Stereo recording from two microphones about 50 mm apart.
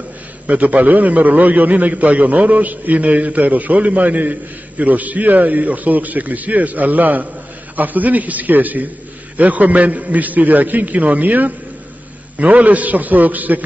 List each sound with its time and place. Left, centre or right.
0.5 s a man's voice: right